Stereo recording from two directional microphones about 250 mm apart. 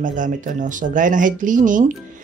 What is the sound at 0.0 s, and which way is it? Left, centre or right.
Speech, right.